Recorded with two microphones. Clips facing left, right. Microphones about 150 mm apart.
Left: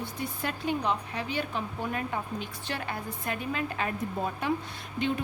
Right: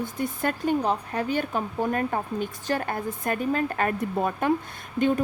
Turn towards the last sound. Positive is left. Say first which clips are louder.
# right 7 dB
turn(degrees=-45)  # may be behind; listen again after turning